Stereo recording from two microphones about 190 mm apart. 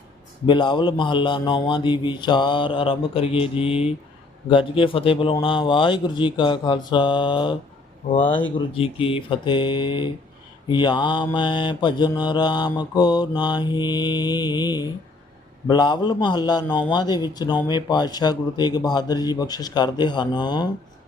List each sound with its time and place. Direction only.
0.4 s a man's voice: 25° left (ahead or behind)